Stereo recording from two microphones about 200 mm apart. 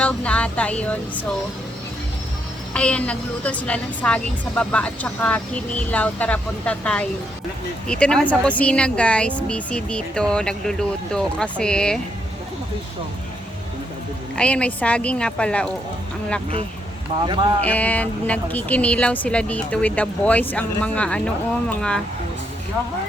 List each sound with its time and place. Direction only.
0.0 s a woman's voice: 5° left (ahead or behind)
2.7 s a woman's voice: 5° left (ahead or behind)
14.3 s speech: 5° left (ahead or behind)
17.2 s speech: 25° right (ahead or behind)
17.6 s a woman's voice: 5° left (ahead or behind)